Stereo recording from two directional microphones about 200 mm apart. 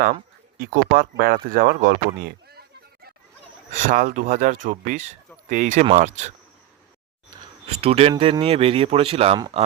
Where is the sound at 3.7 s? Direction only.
40° right (ahead or behind).